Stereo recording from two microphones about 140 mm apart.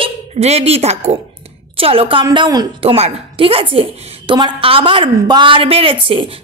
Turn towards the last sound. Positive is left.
turn(degrees=-40)  # may be behind; listen again after turning